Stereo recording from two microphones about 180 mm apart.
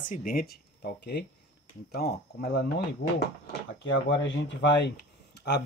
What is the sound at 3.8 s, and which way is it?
Speech, 90° left.